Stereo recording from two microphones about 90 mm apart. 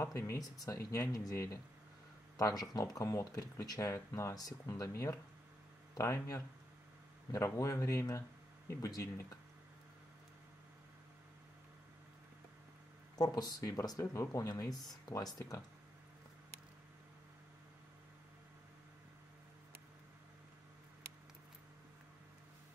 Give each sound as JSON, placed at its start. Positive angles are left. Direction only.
{"t": 0.0, "sound": "speech", "side_deg": 35}
{"t": 7.5, "sound": "speech", "side_deg": 35}
{"t": 13.2, "sound": "speech", "side_deg": 45}
{"t": 15.3, "sound": "speech", "side_deg": 35}